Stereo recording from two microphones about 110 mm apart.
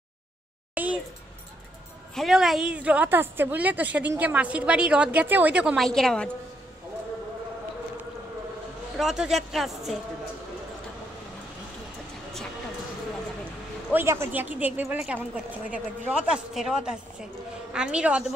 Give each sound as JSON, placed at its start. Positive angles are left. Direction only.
{"t": 0.8, "sound": "speech", "side_deg": -15}
{"t": 2.1, "sound": "speech", "side_deg": -5}
{"t": 5.8, "sound": "speech", "side_deg": 5}
{"t": 8.9, "sound": "speech", "side_deg": -5}
{"t": 13.9, "sound": "speech", "side_deg": -25}